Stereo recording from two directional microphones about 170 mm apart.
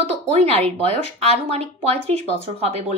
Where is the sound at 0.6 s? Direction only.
35° right (ahead or behind).